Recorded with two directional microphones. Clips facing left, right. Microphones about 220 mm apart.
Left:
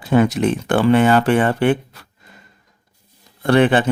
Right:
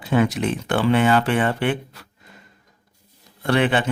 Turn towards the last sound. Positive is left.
turn(degrees=40)  # may be behind; listen again after turning